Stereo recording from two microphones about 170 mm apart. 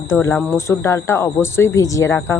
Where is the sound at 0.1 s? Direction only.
15° left (ahead or behind).